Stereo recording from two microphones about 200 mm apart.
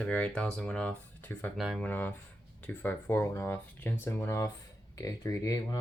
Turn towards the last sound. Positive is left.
turn(degrees=15)  # may be behind; listen again after turning